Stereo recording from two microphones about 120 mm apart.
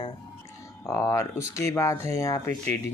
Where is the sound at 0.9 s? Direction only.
25° left (ahead or behind).